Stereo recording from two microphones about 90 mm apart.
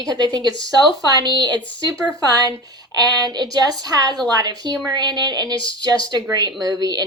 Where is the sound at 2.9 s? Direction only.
45° right (ahead or behind).